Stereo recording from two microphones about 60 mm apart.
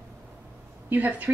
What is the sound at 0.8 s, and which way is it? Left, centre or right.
Speech, right.